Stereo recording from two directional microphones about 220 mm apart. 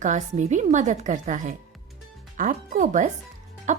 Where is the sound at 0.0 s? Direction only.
35° right (ahead or behind).